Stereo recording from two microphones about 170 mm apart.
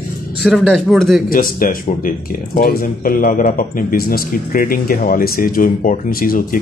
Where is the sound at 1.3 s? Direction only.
55° left (ahead or behind).